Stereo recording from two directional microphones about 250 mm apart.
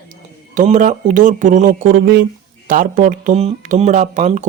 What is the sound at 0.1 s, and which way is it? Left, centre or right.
Speech, right.